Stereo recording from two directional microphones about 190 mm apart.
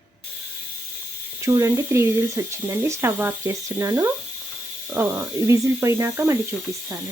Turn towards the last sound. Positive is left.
turn(degrees=-15)  # may be behind; listen again after turning